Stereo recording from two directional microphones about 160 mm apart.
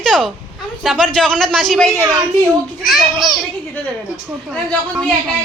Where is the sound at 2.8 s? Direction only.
Centre (ahead or behind).